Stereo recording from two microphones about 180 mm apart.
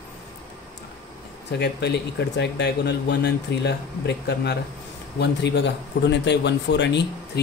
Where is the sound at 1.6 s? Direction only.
70° left (ahead or behind).